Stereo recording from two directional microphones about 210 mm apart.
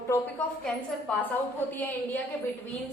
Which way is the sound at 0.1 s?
5° left (ahead or behind).